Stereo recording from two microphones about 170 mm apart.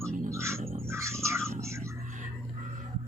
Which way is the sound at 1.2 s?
15° right (ahead or behind).